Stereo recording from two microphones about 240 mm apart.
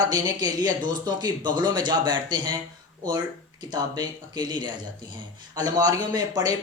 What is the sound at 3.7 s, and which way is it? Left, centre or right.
Speech, centre.